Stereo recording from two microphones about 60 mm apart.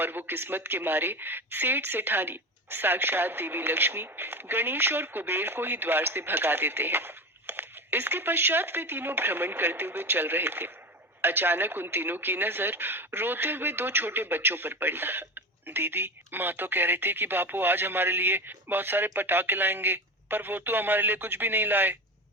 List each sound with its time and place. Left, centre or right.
0.0 s speech: right